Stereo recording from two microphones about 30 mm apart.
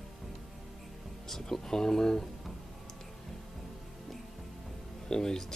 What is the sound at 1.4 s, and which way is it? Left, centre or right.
Speech, centre.